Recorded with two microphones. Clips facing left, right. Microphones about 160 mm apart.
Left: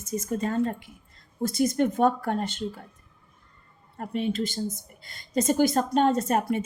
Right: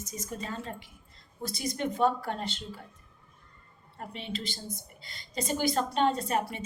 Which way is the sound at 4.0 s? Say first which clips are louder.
Left 10 dB; 50° left (ahead or behind).